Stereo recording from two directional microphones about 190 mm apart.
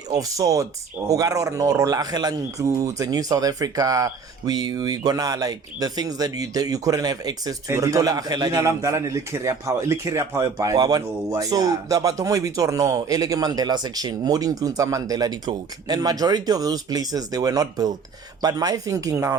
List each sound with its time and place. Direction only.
0.1 s speech: 20° right (ahead or behind)